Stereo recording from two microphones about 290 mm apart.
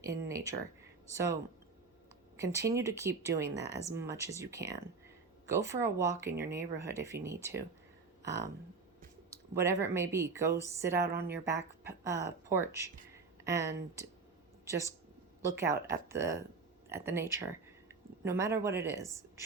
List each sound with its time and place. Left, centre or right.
0.0 s speech: centre
2.3 s speech: centre
11.0 s a woman's voice: right
11.3 s speech: centre